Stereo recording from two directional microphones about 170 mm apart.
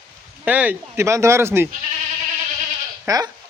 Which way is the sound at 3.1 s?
20° right (ahead or behind).